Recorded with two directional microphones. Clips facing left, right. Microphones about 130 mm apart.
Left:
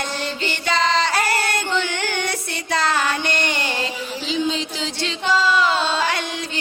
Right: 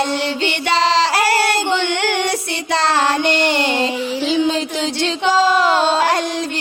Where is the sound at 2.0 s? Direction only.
80° right.